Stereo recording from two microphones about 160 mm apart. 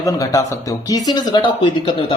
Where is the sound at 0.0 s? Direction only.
20° left (ahead or behind).